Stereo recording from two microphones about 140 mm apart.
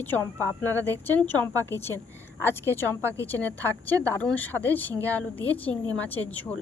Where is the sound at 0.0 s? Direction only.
15° left (ahead or behind).